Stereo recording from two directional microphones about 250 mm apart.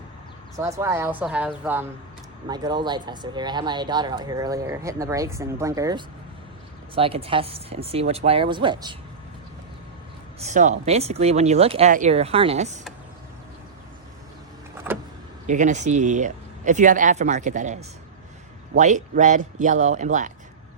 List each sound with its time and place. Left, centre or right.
0.5 s speech: centre
10.4 s speech: right
15.4 s speech: right